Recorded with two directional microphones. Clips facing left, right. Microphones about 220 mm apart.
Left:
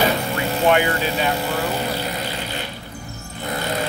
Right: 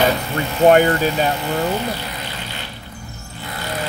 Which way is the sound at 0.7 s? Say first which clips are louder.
Right 6 dB; 45° right (ahead or behind).